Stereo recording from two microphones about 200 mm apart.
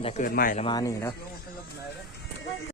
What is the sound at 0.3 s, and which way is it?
Speech, 45° left (ahead or behind).